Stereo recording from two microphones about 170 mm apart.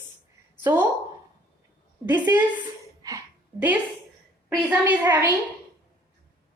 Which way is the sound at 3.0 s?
20° right (ahead or behind).